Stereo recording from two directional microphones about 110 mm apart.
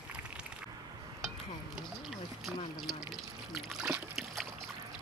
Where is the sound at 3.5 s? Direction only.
5° right (ahead or behind).